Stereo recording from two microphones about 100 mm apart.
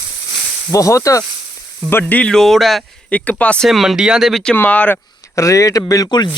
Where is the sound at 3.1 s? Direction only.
15° left (ahead or behind).